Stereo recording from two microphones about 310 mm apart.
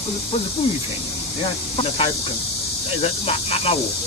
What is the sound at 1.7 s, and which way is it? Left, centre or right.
Speech, centre.